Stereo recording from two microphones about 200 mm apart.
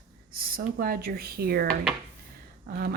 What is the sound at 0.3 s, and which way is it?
Speech, 45° right (ahead or behind).